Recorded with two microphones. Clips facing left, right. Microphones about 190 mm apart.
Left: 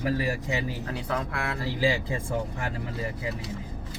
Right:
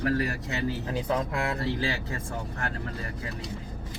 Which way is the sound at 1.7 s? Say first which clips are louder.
Left 5 dB; 10° left (ahead or behind).